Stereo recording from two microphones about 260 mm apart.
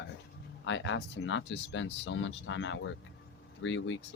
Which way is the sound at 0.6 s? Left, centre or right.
Left.